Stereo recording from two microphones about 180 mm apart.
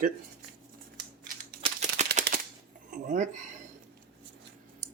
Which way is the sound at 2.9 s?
45° right (ahead or behind).